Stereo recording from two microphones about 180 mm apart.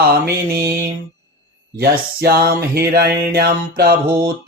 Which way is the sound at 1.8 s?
60° right (ahead or behind).